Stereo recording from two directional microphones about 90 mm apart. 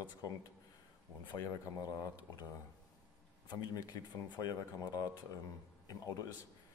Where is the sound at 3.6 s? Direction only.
45° left (ahead or behind).